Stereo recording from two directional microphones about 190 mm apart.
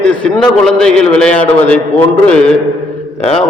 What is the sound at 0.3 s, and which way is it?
A man's voice, centre (ahead or behind).